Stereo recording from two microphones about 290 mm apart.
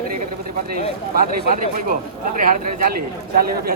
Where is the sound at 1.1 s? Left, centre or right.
Right.